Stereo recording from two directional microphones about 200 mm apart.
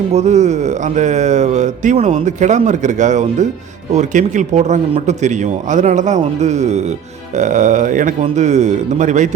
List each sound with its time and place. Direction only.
0.1 s speech: 35° right (ahead or behind)